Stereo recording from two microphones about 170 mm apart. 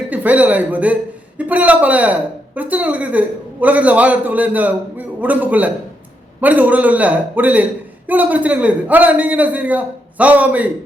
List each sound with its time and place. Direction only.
0.1 s speech: 10° right (ahead or behind)